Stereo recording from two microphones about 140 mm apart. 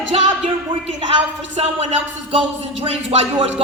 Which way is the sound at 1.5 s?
50° right (ahead or behind).